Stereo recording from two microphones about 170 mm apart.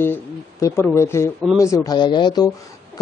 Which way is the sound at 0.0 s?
15° left (ahead or behind).